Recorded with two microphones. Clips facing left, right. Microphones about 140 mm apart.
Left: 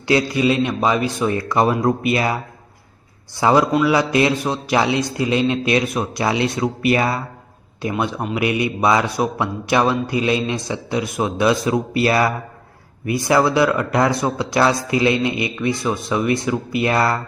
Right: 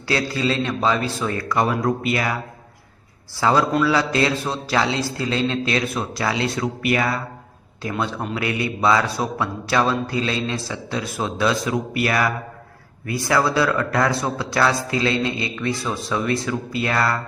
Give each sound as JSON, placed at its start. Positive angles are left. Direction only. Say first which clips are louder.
{"t": 0.1, "sound": "speech", "louder": "left 5 dB", "side_deg": 20}
{"t": 3.4, "sound": "a man's voice", "louder": "left 3 dB", "side_deg": 20}